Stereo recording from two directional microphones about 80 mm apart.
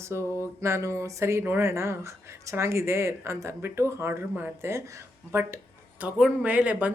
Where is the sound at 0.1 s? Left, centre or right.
Right.